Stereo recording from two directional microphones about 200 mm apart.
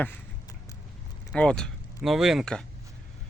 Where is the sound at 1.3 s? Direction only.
5° left (ahead or behind).